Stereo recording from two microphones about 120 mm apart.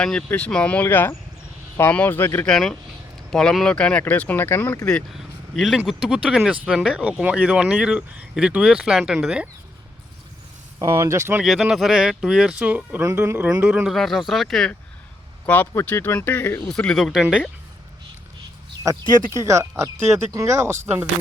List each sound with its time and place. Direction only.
0.0 s speech: 10° left (ahead or behind)
2.5 s speech: 5° left (ahead or behind); by 4.8 s 20° left (ahead or behind)
4.9 s speech: 5° left (ahead or behind)
11.0 s speech: 25° right (ahead or behind)
11.4 s speech: centre (ahead or behind)
15.4 s speech: 15° left (ahead or behind)
16.6 s speech: 5° left (ahead or behind)
18.8 s speech: 25° right (ahead or behind)